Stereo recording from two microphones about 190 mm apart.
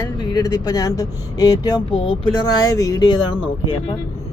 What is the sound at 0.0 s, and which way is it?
Speech, 20° left (ahead or behind).